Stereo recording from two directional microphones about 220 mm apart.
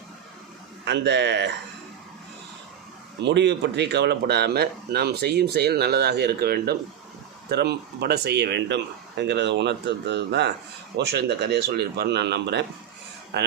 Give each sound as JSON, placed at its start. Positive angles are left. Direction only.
{"t": 0.9, "sound": "speech", "side_deg": -50}
{"t": 3.2, "sound": "speech", "side_deg": -50}